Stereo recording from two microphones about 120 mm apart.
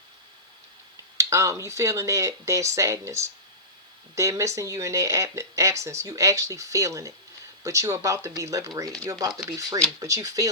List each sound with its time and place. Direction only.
1.1 s speech: 25° right (ahead or behind)